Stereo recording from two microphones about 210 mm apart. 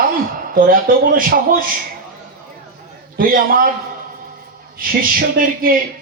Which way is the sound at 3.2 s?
40° right (ahead or behind).